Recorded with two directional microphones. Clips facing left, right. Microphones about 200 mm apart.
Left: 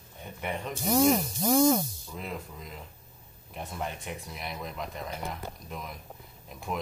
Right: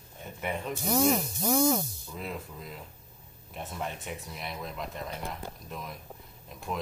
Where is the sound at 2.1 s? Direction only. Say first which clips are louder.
Even; centre (ahead or behind).